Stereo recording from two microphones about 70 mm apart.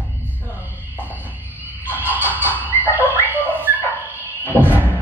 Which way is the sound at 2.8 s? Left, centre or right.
Right.